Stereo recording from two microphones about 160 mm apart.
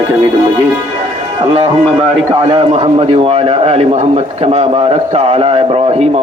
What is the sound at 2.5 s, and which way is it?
A man's voice, 40° right (ahead or behind).